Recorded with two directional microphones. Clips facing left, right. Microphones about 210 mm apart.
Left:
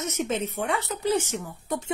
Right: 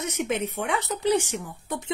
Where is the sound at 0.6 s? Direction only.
80° right.